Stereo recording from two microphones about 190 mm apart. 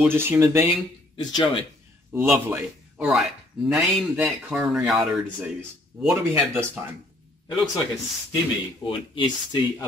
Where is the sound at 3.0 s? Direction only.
Centre (ahead or behind).